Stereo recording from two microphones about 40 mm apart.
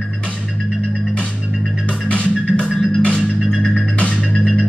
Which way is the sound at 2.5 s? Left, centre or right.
Left.